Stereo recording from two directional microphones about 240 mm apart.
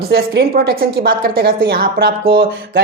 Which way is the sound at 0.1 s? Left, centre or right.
Right.